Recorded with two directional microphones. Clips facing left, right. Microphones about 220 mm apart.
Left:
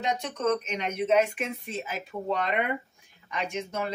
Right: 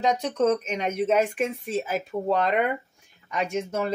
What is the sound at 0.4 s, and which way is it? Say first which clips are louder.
Speech: right 4 dB; 40° right (ahead or behind).